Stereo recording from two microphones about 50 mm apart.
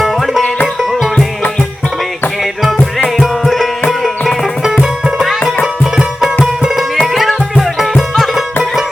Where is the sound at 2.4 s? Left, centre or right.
Centre.